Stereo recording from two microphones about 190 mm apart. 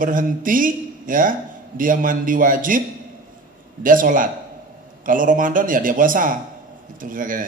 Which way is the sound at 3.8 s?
45° right (ahead or behind).